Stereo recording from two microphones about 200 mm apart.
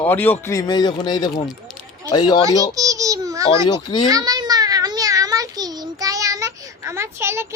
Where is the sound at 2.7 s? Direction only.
15° right (ahead or behind).